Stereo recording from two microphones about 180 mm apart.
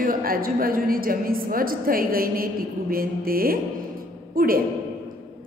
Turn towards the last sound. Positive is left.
turn(degrees=-55)  # may be behind; listen again after turning